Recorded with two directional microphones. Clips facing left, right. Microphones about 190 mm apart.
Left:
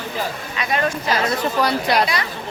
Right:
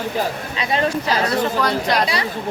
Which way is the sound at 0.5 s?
25° right (ahead or behind).